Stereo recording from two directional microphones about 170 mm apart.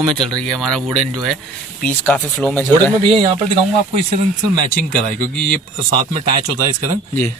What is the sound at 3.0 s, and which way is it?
Speech, 30° right (ahead or behind).